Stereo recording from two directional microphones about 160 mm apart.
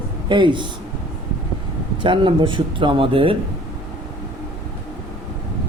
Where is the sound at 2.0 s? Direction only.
30° right (ahead or behind).